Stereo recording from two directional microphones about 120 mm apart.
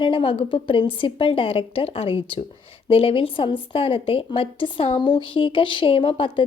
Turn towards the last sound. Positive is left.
turn(degrees=45)  # may be behind; listen again after turning